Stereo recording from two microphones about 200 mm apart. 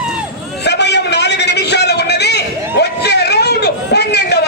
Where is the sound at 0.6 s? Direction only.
60° left (ahead or behind).